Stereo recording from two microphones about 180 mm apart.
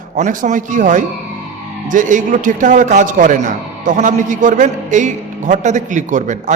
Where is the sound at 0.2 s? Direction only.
45° right (ahead or behind).